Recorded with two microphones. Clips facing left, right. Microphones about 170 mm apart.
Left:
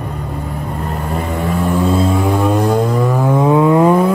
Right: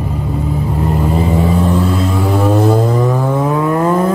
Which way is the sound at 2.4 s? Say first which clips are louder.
Right 5 dB; 5° right (ahead or behind).